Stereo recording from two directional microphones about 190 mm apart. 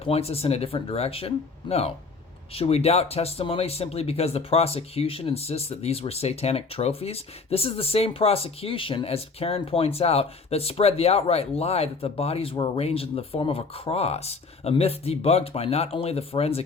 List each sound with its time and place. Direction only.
0.0 s speech: 30° left (ahead or behind)